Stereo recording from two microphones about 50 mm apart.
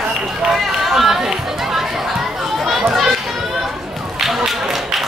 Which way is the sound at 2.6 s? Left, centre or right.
Centre.